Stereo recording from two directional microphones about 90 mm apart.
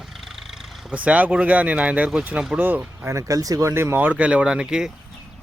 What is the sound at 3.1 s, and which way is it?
A man's voice, 40° right (ahead or behind).